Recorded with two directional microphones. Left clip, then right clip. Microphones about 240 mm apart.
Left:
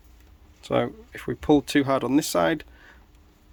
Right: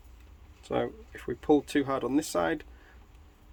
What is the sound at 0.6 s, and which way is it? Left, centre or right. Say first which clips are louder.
Speech: left 6 dB; left.